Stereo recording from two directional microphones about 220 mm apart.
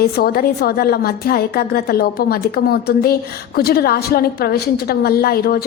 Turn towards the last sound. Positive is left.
turn(degrees=45)  # may be behind; listen again after turning